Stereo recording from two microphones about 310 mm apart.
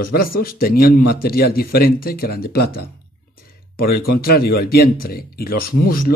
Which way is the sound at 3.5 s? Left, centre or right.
Left.